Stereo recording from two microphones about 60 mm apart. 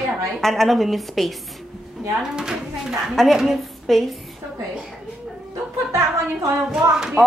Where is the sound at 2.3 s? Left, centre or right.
Centre.